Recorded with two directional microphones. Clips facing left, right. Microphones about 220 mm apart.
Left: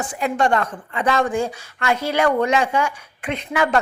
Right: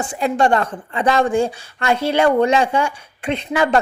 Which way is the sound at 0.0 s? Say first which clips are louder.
Right 3 dB; 30° right (ahead or behind).